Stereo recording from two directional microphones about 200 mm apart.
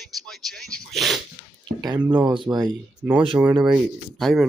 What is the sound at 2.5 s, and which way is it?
Speech, 20° right (ahead or behind).